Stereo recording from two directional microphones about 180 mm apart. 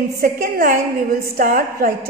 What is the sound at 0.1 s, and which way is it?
A woman's voice, 55° right (ahead or behind).